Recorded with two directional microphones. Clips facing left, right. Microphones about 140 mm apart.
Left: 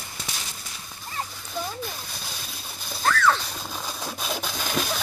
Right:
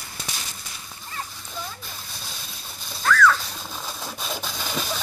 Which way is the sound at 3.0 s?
30° left (ahead or behind).